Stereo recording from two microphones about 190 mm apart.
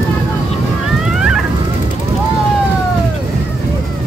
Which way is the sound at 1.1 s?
5° right (ahead or behind).